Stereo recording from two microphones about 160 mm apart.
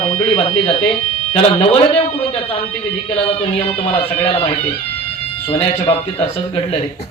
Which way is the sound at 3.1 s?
35° left (ahead or behind).